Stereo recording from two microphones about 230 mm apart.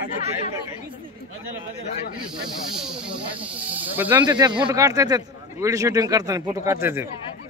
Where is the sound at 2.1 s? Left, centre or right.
Right.